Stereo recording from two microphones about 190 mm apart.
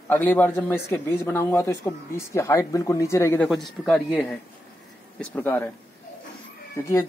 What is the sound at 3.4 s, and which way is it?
A man's voice, centre (ahead or behind).